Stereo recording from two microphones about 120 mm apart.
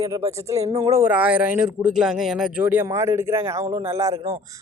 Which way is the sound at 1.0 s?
15° right (ahead or behind).